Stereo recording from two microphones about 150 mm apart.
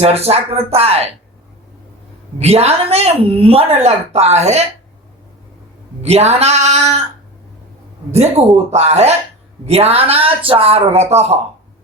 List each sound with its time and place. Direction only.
0.0 s a woman's voice: 45° right (ahead or behind)
2.4 s a woman's voice: 45° right (ahead or behind)
6.0 s a woman's voice: 45° right (ahead or behind)
8.1 s a woman's voice: 45° right (ahead or behind)